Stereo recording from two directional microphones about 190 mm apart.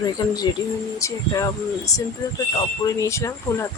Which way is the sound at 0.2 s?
20° left (ahead or behind).